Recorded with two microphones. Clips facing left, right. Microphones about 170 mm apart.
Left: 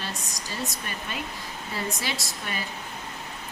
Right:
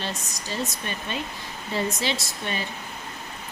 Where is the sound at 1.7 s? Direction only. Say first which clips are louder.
Right 5 dB; 25° right (ahead or behind).